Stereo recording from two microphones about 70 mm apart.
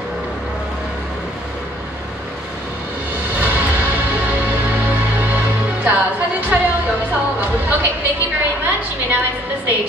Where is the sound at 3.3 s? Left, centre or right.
Right.